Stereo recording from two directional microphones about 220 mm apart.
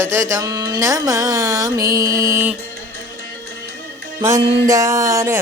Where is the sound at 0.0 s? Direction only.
10° right (ahead or behind).